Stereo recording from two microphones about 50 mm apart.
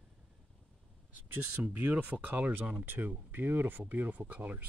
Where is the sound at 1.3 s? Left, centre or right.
Right.